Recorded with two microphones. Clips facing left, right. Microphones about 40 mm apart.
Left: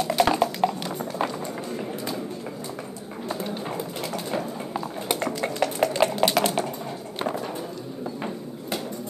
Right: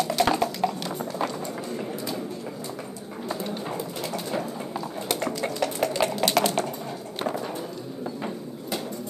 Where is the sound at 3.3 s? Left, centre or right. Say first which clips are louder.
Left 1 dB; centre.